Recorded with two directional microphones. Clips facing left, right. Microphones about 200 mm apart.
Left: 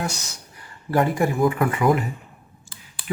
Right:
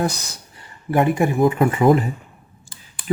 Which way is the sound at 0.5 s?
20° right (ahead or behind).